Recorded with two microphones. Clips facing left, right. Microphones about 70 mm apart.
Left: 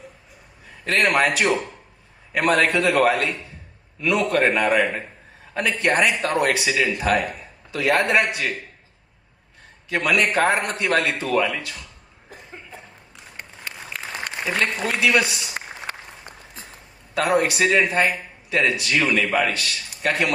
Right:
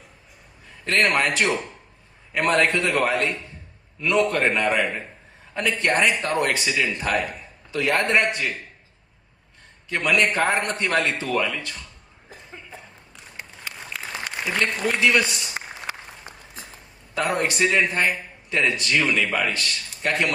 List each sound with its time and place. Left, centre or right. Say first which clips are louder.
0.9 s a man's voice: left 1 dB; centre
2.3 s a man's voice: left 1 dB; centre
9.9 s a man's voice: left 1 dB; centre
13.3 s applause: left 1 dB; left
14.6 s a man's voice: right 1 dB; centre
15.8 s applause: right 1 dB; centre
17.2 s a man's voice: left 3 dB; centre